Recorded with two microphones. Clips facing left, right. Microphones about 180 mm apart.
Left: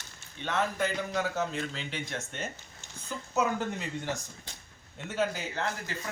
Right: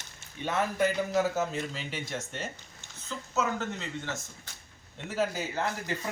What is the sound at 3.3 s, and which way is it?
Speech, 15° left (ahead or behind).